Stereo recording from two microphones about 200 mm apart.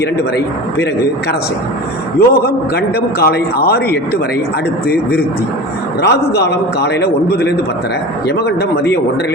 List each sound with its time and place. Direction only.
0.0 s a man's voice: 55° left (ahead or behind)
2.1 s a man's voice: 50° left (ahead or behind)
6.0 s a man's voice: 55° left (ahead or behind)